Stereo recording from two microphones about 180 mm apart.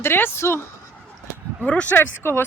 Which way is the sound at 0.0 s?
15° left (ahead or behind).